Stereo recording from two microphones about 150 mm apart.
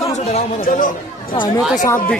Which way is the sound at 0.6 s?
65° left (ahead or behind).